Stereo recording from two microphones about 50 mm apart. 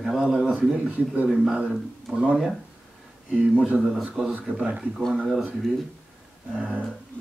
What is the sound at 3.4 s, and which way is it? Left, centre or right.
Speech, right.